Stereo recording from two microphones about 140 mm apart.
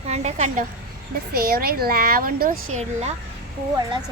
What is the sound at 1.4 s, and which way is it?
A woman's voice, 90° right.